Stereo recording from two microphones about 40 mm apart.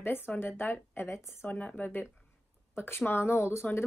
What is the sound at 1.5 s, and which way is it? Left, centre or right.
Speech, left.